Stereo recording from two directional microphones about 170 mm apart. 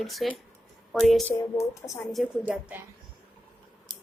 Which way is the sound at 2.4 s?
10° right (ahead or behind).